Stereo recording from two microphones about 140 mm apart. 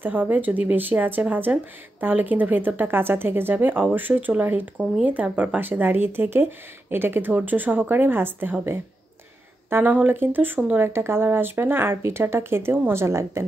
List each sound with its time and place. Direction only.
0.0 s speech: 10° right (ahead or behind)